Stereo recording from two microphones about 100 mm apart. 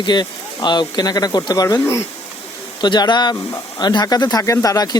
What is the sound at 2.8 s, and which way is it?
Speech, 50° left (ahead or behind).